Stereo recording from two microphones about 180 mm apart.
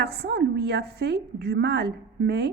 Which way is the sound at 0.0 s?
65° right (ahead or behind).